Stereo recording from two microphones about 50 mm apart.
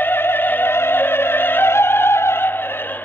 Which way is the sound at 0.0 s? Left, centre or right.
Left.